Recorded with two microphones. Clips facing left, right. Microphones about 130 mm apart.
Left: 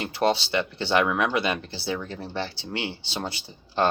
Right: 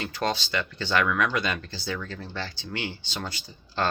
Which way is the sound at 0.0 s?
25° left (ahead or behind).